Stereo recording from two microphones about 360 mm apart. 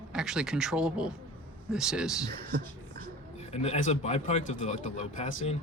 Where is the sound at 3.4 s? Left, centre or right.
Centre.